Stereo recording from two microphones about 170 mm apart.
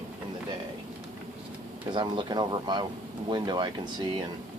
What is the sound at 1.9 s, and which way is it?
Speech, 30° right (ahead or behind).